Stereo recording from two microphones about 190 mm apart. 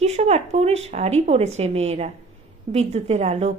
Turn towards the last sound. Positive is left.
turn(degrees=-30)  # may be behind; listen again after turning